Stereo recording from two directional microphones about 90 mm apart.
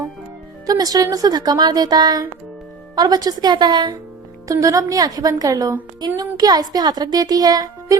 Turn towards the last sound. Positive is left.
turn(degrees=-45)  # may be behind; listen again after turning